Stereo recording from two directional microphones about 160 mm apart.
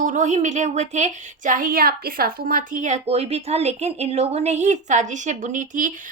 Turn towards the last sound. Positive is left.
turn(degrees=-50)  # may be behind; listen again after turning